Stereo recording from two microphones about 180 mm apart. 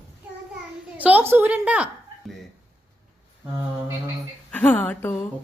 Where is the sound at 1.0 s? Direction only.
10° right (ahead or behind).